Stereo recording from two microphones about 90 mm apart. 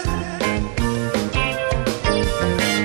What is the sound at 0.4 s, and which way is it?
Music, 5° right (ahead or behind).